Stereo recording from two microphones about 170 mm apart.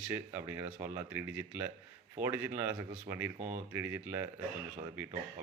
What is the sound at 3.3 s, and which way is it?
Speech, 45° right (ahead or behind).